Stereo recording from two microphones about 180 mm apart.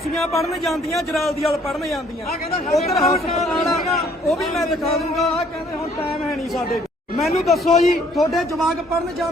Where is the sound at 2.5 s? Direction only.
35° left (ahead or behind).